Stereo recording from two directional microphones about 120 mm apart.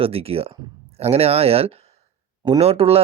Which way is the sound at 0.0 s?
55° right (ahead or behind).